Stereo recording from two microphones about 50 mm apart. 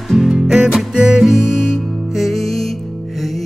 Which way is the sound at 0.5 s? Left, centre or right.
Centre.